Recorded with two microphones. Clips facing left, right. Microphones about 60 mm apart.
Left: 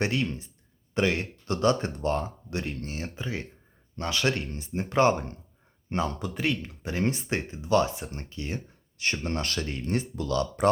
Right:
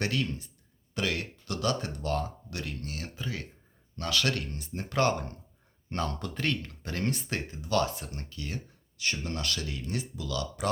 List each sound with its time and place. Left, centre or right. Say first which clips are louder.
0.0 s speech: left 3 dB; left
5.9 s speech: left 4 dB; centre; by 10.7 s left